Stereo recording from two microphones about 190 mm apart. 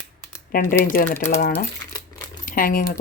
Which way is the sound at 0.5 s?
45° left (ahead or behind).